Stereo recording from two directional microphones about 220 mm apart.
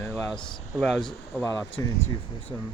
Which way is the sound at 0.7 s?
Centre (ahead or behind).